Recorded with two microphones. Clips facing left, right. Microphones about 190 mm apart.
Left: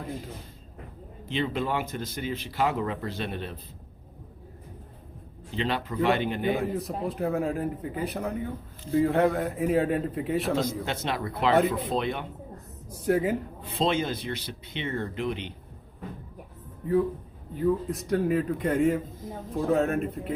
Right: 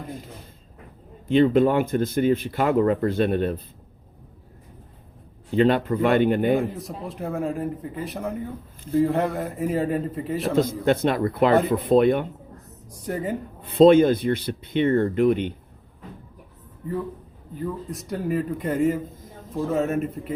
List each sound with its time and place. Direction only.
1.3 s speech: 50° right (ahead or behind)
5.5 s speech: 50° right (ahead or behind)
6.6 s speech: centre (ahead or behind)
10.6 s speech: 55° right (ahead or behind)
13.1 s speech: centre (ahead or behind)
13.7 s speech: 55° right (ahead or behind)
17.9 s speech: centre (ahead or behind)